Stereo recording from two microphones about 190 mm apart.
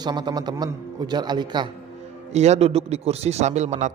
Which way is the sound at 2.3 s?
35° right (ahead or behind).